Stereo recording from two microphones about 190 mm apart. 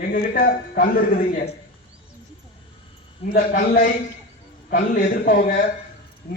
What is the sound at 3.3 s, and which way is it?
A man's voice, 50° left (ahead or behind).